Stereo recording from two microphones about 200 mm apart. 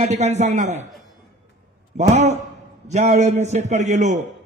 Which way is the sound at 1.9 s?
35° right (ahead or behind).